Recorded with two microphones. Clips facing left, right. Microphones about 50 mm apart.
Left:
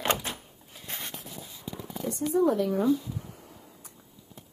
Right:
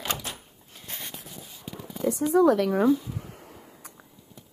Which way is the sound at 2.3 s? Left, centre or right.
Right.